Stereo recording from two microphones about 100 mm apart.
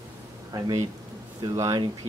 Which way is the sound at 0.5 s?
40° right (ahead or behind).